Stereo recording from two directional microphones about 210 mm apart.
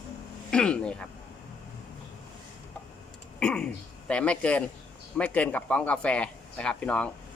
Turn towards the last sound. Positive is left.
turn(degrees=5)  # may be behind; listen again after turning